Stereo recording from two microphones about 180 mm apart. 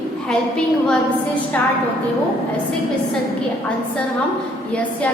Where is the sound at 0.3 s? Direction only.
5° left (ahead or behind).